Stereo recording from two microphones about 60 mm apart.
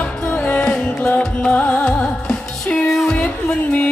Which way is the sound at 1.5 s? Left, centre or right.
Left.